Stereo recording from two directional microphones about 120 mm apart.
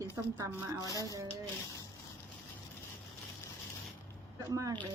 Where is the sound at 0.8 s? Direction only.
30° left (ahead or behind).